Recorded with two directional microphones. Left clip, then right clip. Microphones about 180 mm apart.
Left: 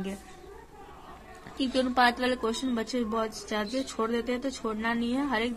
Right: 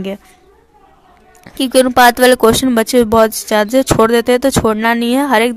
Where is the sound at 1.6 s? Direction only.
45° right (ahead or behind).